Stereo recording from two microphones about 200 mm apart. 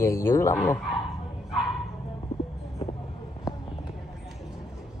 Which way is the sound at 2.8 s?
30° left (ahead or behind).